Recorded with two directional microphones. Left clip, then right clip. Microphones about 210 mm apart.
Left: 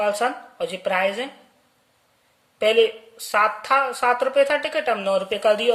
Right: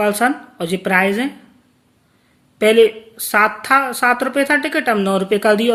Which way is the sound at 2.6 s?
20° right (ahead or behind).